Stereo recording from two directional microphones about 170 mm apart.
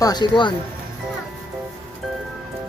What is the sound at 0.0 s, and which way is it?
Speech, 25° left (ahead or behind).